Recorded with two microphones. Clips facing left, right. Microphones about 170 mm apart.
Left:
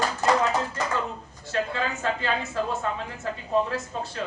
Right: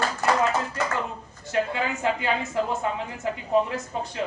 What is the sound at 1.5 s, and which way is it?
Speech, 15° right (ahead or behind).